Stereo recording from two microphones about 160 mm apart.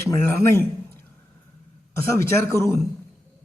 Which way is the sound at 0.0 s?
15° left (ahead or behind).